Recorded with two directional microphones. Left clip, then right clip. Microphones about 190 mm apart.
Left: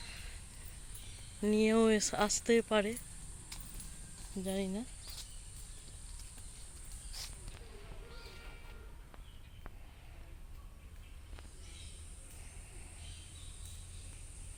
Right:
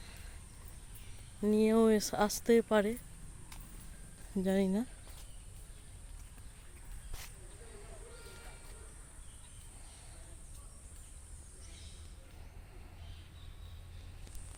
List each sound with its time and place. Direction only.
1.4 s speech: 10° right (ahead or behind)
4.4 s speech: 40° right (ahead or behind)